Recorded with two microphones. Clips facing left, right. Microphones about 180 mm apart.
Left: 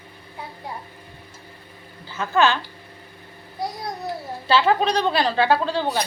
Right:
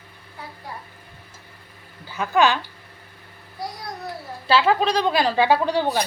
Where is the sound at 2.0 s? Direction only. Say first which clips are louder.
Right 1 dB; 15° right (ahead or behind).